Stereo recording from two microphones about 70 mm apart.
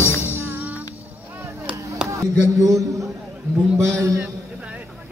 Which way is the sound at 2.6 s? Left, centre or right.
Right.